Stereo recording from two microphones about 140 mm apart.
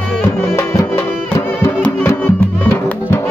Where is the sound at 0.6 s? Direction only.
20° left (ahead or behind).